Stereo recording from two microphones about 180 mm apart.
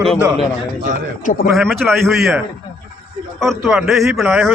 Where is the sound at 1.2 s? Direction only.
50° left (ahead or behind).